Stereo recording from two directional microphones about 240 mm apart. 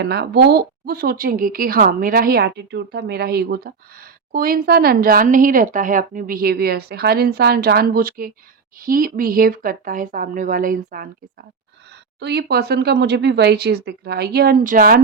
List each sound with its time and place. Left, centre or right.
0.0 s speech: right
12.2 s speech: right